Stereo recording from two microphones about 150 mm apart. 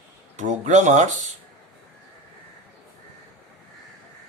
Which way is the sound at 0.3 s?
50° right (ahead or behind).